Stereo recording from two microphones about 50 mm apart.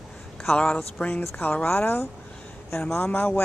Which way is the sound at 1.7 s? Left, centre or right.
Left.